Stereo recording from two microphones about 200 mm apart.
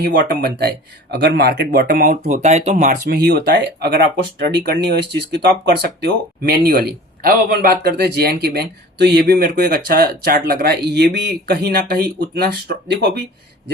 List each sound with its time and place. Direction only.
0.0 s speech: 50° right (ahead or behind)